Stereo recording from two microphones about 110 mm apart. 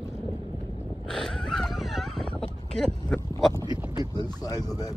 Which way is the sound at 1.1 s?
5° left (ahead or behind).